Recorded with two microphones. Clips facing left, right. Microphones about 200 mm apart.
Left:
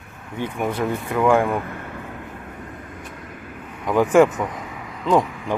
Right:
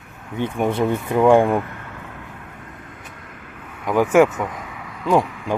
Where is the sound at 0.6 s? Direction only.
25° right (ahead or behind).